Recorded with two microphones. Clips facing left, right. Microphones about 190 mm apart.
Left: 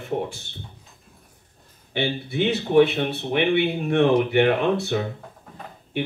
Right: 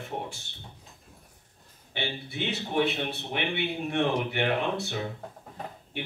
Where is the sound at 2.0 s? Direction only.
60° left (ahead or behind).